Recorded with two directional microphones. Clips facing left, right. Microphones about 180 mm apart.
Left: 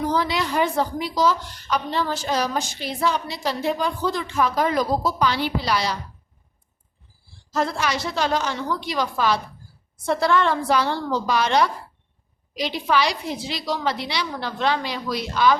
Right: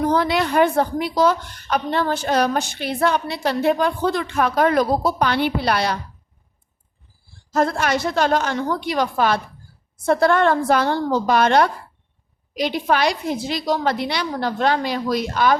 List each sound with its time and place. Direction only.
0.0 s a woman's voice: 55° right (ahead or behind)
7.5 s a woman's voice: 55° right (ahead or behind)